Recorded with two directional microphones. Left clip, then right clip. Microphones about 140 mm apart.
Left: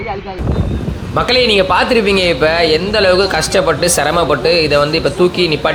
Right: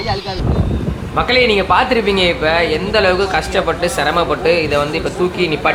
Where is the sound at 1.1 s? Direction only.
25° left (ahead or behind).